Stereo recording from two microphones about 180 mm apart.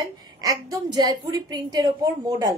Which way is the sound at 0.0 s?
20° right (ahead or behind).